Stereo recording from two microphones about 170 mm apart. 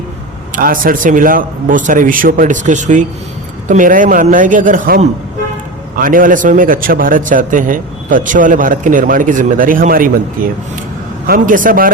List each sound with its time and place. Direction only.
0.5 s a man's voice: 55° right (ahead or behind)